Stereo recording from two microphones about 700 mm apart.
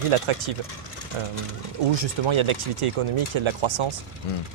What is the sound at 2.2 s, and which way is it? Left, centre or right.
Speech, right.